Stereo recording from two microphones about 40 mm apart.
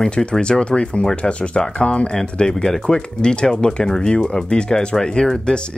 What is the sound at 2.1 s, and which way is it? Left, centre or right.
Speech, centre.